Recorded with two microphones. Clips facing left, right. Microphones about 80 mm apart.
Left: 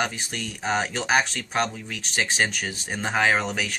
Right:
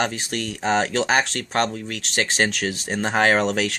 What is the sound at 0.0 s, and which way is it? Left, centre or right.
Speech, right.